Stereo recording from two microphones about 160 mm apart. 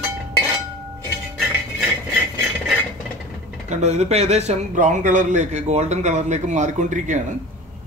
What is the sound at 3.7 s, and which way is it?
A man's voice, 45° right (ahead or behind).